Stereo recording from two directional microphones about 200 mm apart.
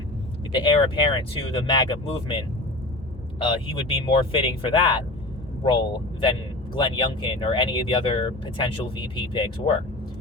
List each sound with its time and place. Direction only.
0.5 s speech: 25° left (ahead or behind)
6.7 s speech: 25° left (ahead or behind)